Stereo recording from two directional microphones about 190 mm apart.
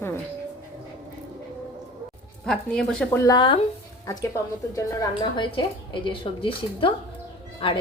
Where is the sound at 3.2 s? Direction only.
20° left (ahead or behind).